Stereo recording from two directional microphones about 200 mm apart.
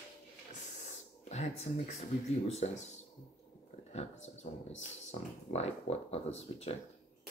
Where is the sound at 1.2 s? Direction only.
35° left (ahead or behind).